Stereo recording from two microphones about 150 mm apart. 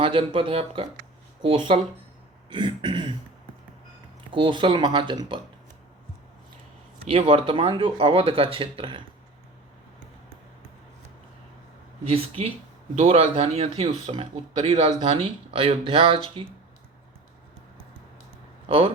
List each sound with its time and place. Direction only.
0.0 s speech: 35° right (ahead or behind)
4.3 s speech: 30° right (ahead or behind)
7.0 s speech: 40° right (ahead or behind)
12.0 s speech: 40° right (ahead or behind)
18.7 s speech: 40° right (ahead or behind)